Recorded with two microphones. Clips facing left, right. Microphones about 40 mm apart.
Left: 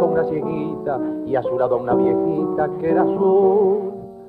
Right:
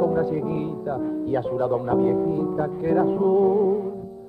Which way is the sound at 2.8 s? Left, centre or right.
Centre.